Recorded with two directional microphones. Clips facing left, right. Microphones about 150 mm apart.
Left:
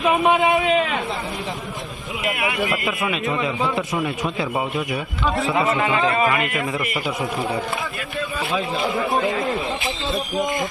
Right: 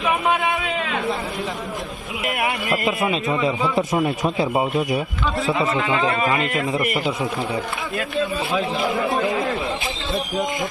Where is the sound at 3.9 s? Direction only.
25° right (ahead or behind).